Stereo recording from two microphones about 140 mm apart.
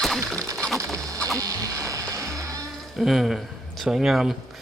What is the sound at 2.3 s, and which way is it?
Music, 25° right (ahead or behind).